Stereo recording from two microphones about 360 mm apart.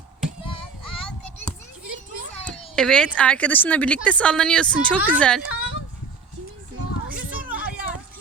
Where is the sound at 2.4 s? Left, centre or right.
Centre.